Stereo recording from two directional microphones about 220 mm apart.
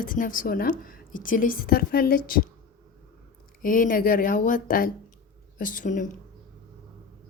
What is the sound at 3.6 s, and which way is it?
Speech, 40° left (ahead or behind).